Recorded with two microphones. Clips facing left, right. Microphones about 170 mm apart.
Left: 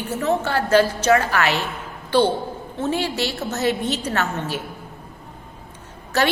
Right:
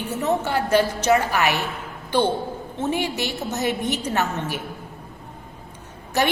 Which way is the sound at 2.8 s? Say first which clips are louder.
Left 2 dB; 15° right (ahead or behind).